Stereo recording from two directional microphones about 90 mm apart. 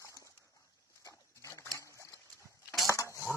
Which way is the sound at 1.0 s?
35° left (ahead or behind).